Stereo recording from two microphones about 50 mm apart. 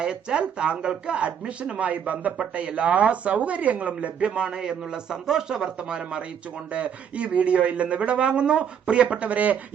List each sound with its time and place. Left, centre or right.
0.0 s speech: centre